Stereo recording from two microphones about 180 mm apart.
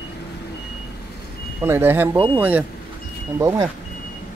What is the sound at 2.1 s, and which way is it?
Speech, 25° right (ahead or behind).